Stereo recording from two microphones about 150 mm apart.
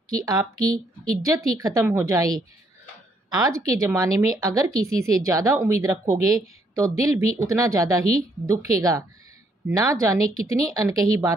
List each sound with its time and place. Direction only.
0.1 s a woman's voice: 25° right (ahead or behind)